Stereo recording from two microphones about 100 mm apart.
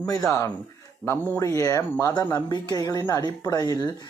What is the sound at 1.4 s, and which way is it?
Speech, 30° left (ahead or behind).